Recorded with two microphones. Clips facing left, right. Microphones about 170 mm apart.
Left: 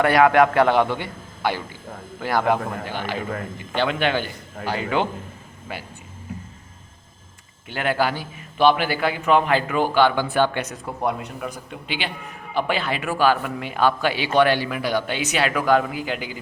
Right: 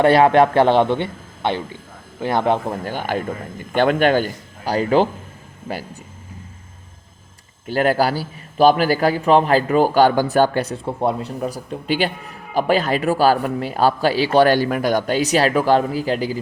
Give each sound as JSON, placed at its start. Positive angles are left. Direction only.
{"t": 0.0, "sound": "a man's voice", "side_deg": -30}
{"t": 2.8, "sound": "a man's voice", "side_deg": -45}
{"t": 7.7, "sound": "a man's voice", "side_deg": -40}